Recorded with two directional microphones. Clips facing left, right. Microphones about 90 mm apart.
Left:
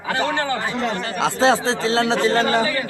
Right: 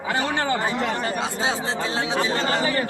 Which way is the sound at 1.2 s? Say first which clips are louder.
Left 8 dB; 90° left.